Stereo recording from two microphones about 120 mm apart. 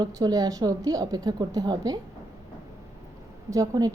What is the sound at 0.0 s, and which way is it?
A woman's voice, 30° right (ahead or behind).